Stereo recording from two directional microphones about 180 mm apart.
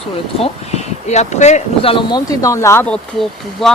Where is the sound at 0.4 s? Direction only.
35° left (ahead or behind).